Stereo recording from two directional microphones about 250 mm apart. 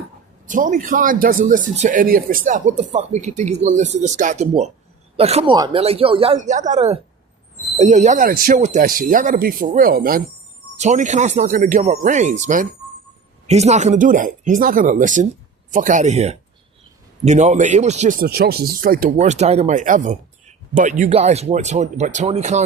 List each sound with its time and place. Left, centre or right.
0.4 s speech: right